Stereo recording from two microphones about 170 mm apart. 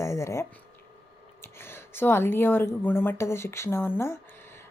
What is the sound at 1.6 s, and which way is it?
A woman's voice, 15° left (ahead or behind).